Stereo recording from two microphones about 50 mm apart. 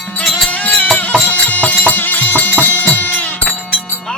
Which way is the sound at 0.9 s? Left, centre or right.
Left.